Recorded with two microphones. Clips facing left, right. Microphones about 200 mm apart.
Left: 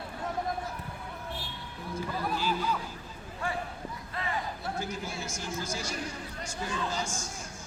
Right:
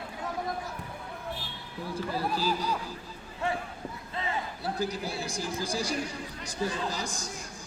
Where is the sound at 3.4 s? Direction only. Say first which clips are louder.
Right 4 dB; 25° right (ahead or behind).